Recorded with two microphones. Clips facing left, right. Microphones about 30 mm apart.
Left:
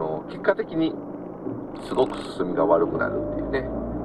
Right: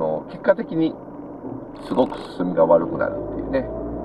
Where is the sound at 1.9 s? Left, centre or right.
Left.